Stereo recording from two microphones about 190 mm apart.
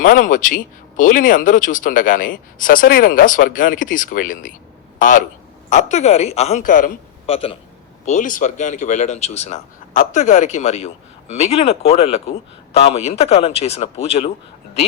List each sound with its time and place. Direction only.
0.0 s speech: 45° left (ahead or behind)
7.3 s speech: 30° left (ahead or behind)
8.0 s speech: 40° left (ahead or behind)